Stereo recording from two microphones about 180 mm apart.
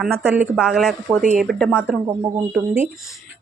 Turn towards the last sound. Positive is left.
turn(degrees=0)  # may be behind; listen again after turning